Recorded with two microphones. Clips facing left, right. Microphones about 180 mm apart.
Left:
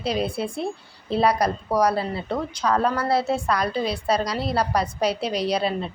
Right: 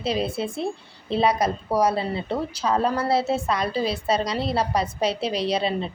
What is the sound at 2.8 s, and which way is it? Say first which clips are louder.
Speech: even; 25° right (ahead or behind).